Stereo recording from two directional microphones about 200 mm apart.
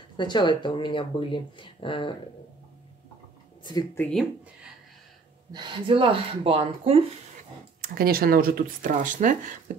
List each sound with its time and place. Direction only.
0.2 s speech: 25° left (ahead or behind)
3.7 s speech: 10° left (ahead or behind)
5.5 s speech: 25° right (ahead or behind)
7.8 s speech: 50° right (ahead or behind)